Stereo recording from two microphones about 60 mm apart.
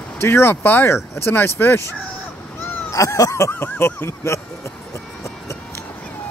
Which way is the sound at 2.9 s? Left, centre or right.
Left.